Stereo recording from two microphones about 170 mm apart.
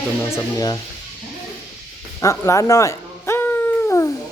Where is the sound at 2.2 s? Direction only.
20° left (ahead or behind).